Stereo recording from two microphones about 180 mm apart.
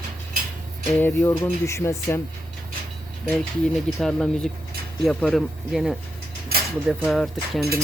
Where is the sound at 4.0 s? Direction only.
5° left (ahead or behind).